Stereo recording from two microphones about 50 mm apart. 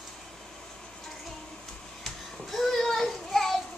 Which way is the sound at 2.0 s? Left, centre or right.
Centre.